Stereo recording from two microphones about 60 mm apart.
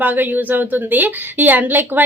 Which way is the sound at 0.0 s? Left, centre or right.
Right.